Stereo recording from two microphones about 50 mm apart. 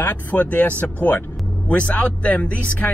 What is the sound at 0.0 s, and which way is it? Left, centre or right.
Speech, left.